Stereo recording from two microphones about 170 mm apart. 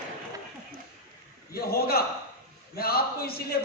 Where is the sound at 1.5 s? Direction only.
65° left (ahead or behind).